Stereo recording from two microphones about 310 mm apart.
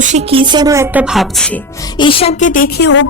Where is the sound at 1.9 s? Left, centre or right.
Centre; by 3.0 s left.